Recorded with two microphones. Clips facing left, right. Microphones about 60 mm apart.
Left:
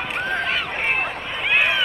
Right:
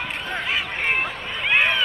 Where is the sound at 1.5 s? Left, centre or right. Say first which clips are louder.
Even; centre.